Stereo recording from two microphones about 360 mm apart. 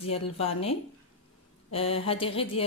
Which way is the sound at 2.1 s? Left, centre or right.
Centre.